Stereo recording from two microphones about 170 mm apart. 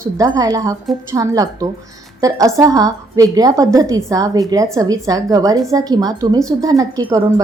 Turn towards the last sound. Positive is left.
turn(degrees=-20)  # may be behind; listen again after turning